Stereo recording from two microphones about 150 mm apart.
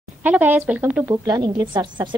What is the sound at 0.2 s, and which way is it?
Speech, 10° right (ahead or behind).